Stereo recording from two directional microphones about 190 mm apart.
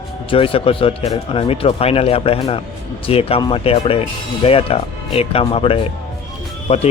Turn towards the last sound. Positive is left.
turn(degrees=35)  # may be behind; listen again after turning